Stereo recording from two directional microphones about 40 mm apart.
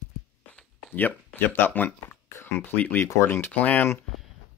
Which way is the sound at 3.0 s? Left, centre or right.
Left.